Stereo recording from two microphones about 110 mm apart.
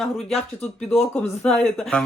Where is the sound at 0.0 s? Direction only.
5° left (ahead or behind).